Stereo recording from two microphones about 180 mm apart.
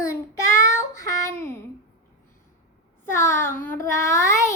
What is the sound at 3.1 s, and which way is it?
Child singing, 15° left (ahead or behind).